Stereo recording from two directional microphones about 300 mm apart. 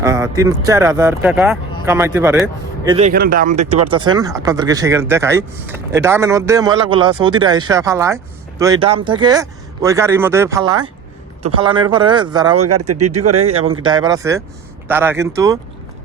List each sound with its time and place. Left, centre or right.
0.0 s speech: centre
3.1 s speech: right
12.5 s speech: right
13.8 s speech: centre